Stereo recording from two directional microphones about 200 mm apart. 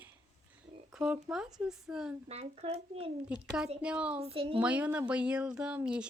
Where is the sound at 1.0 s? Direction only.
5° right (ahead or behind).